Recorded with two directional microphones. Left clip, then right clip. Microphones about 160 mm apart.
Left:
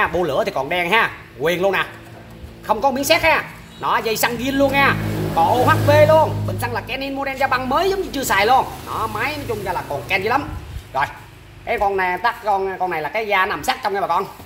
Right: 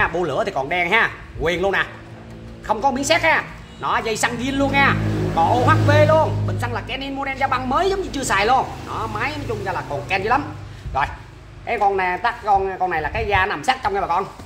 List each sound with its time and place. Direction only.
0.0 s speech: 40° left (ahead or behind)